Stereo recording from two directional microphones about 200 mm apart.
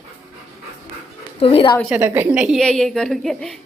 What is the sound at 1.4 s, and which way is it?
Speech, 30° left (ahead or behind).